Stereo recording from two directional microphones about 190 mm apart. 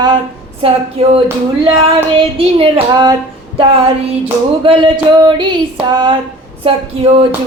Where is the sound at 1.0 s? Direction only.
30° right (ahead or behind).